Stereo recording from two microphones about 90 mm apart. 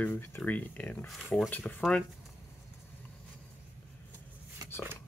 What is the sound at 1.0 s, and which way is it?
Speech, centre (ahead or behind).